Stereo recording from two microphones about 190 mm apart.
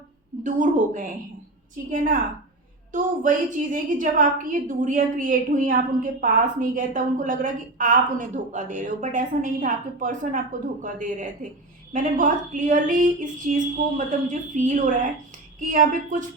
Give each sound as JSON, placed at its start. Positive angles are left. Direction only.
{"t": 0.4, "sound": "a woman's voice", "side_deg": -40}
{"t": 2.9, "sound": "a woman's voice", "side_deg": -40}